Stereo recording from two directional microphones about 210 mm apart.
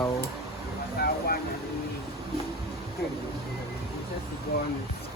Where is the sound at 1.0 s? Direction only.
45° left (ahead or behind).